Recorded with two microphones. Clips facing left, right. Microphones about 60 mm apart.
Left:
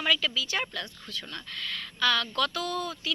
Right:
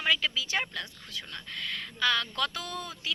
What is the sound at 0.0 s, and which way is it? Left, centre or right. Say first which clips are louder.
Speech: left 1 dB; right.